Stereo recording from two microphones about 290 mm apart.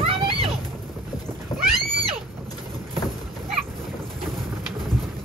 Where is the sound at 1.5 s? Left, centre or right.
Centre.